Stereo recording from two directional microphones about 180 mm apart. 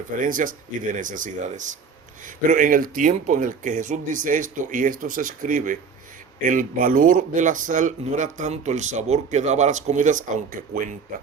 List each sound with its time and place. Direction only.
0.2 s speech: 50° right (ahead or behind)